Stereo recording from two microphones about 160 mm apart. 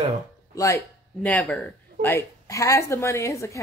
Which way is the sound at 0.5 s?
20° left (ahead or behind).